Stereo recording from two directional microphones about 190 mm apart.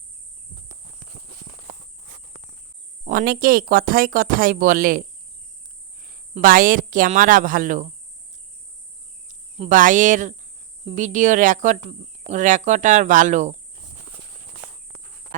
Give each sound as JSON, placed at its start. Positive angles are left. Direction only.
{"t": 3.1, "sound": "speech", "side_deg": -45}
{"t": 6.3, "sound": "speech", "side_deg": -45}
{"t": 9.6, "sound": "speech", "side_deg": -45}